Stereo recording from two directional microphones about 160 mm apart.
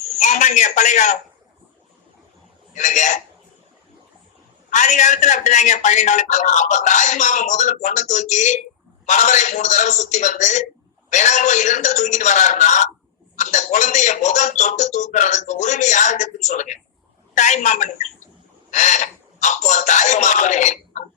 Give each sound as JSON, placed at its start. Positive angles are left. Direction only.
{"t": 0.2, "sound": "a man's voice", "side_deg": 50}
{"t": 2.7, "sound": "a man's voice", "side_deg": 50}
{"t": 4.7, "sound": "a man's voice", "side_deg": 50}